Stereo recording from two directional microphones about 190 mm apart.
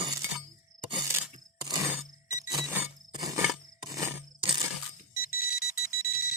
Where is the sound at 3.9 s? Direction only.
15° right (ahead or behind).